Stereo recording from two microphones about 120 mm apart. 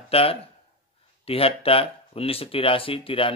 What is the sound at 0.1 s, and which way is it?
Speech, 55° left (ahead or behind).